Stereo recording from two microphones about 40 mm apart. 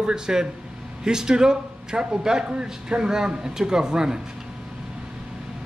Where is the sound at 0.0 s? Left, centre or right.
Centre.